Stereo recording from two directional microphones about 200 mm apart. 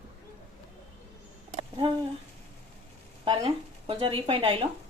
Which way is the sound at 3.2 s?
30° right (ahead or behind).